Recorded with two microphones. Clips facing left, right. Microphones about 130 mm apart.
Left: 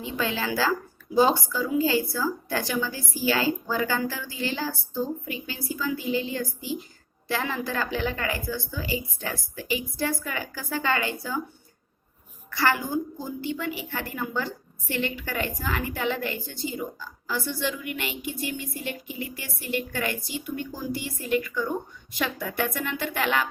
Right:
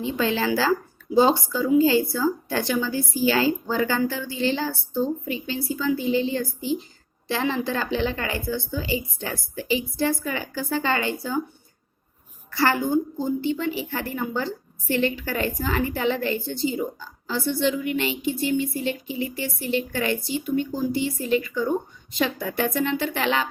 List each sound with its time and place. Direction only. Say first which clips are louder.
0.0 s a woman's voice: right 5 dB; 30° right (ahead or behind)
12.5 s a woman's voice: right 4 dB; 30° right (ahead or behind)